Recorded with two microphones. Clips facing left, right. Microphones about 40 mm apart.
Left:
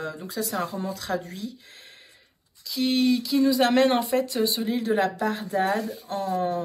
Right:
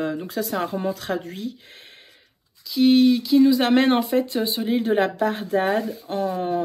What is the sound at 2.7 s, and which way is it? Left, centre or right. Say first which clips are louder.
Speech: right 6 dB; right.